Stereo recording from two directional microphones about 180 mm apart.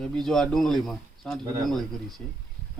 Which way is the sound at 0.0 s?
Centre (ahead or behind).